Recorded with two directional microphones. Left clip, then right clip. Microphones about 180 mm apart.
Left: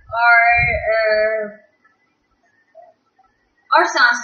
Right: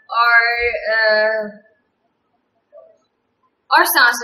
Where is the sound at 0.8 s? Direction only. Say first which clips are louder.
Right 1 dB; 20° right (ahead or behind).